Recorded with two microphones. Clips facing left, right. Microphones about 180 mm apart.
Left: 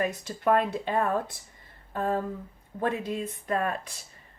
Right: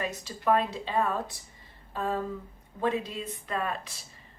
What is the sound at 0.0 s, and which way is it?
A woman's voice, 50° left (ahead or behind).